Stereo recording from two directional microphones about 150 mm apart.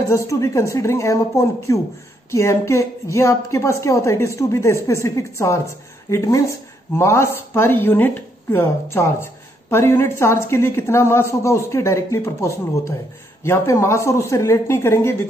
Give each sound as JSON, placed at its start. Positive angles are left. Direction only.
{"t": 0.1, "sound": "a woman's voice", "side_deg": 20}